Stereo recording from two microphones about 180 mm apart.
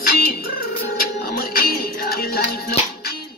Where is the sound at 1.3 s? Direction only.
55° left (ahead or behind).